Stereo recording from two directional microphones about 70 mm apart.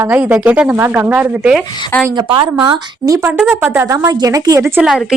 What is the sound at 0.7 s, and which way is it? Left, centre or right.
Speech, right.